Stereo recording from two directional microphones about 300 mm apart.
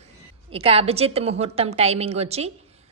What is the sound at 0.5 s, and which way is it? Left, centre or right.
A woman's voice, centre.